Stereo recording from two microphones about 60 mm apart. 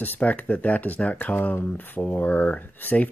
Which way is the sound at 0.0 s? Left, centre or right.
Left.